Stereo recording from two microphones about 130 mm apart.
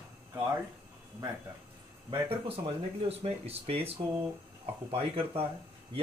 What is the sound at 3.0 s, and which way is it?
Speech, 50° right (ahead or behind).